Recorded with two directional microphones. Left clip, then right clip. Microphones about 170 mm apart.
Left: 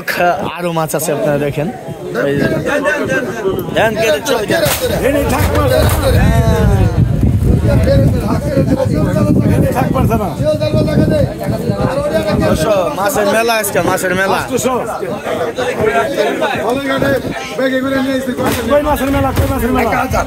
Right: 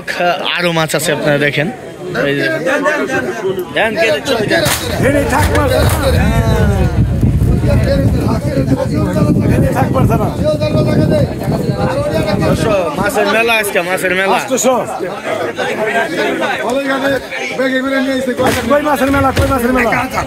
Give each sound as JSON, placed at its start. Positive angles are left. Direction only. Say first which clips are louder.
{"t": 0.2, "sound": "speech", "louder": "right 2 dB", "side_deg": 5}
{"t": 3.7, "sound": "speech", "louder": "even", "side_deg": 10}
{"t": 9.8, "sound": "speech", "louder": "right 1 dB", "side_deg": -20}
{"t": 12.6, "sound": "speech", "louder": "left 1 dB", "side_deg": 15}
{"t": 14.5, "sound": "speech", "louder": "right 3 dB", "side_deg": -50}
{"t": 18.7, "sound": "a man's voice", "louder": "left 2 dB", "side_deg": -40}